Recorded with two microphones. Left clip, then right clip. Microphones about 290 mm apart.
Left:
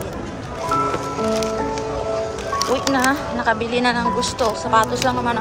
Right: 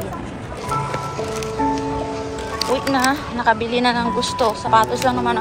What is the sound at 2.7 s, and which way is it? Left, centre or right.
Speech, centre.